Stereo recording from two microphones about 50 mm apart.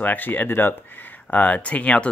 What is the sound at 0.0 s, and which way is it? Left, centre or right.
Speech, left.